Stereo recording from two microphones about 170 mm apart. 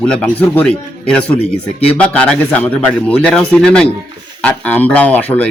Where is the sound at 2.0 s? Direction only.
5° left (ahead or behind).